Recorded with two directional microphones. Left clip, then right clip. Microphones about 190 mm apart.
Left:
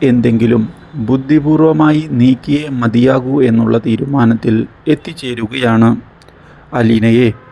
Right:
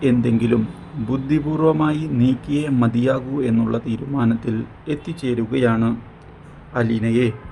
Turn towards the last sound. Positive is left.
turn(degrees=35)  # may be behind; listen again after turning